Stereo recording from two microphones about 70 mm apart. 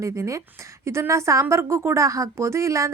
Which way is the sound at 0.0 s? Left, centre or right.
Right.